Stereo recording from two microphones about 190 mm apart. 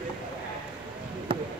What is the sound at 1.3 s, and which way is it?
Basketball bounce, 25° right (ahead or behind).